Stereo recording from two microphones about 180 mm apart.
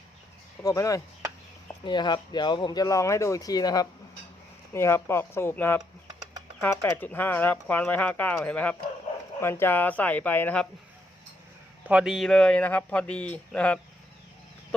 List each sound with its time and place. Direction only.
0.6 s speech: 20° left (ahead or behind)
11.9 s speech: 5° right (ahead or behind)